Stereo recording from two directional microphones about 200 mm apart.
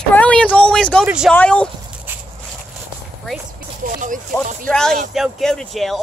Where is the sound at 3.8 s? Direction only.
40° right (ahead or behind).